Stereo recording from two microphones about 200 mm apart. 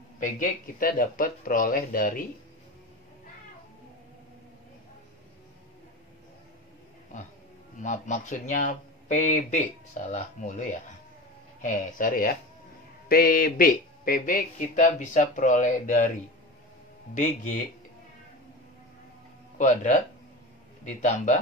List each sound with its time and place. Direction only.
0.2 s speech: 45° left (ahead or behind)
7.8 s speech: 40° left (ahead or behind)
17.1 s speech: 40° left (ahead or behind)
19.6 s speech: 40° left (ahead or behind)